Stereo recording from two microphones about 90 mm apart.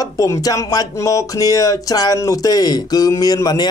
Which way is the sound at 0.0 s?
40° left (ahead or behind).